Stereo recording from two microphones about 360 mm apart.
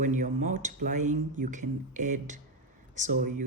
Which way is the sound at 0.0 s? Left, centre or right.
Centre.